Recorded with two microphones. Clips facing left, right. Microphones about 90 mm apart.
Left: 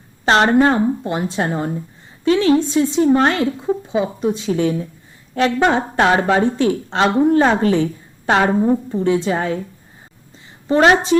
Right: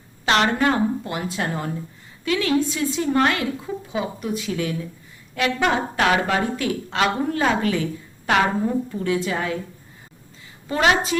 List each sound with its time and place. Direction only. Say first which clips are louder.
0.3 s a woman's voice: left 6 dB; 35° left (ahead or behind)
10.7 s a woman's voice: left 7 dB; 40° left (ahead or behind)